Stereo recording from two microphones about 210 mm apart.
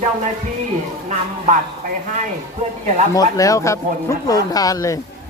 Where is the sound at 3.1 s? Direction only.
15° left (ahead or behind).